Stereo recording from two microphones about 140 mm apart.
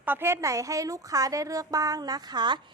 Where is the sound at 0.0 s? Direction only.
15° right (ahead or behind).